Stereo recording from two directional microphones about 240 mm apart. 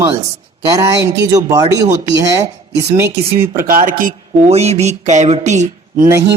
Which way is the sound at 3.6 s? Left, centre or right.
Right.